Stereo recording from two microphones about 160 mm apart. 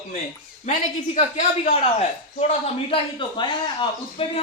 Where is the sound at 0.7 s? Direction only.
45° left (ahead or behind).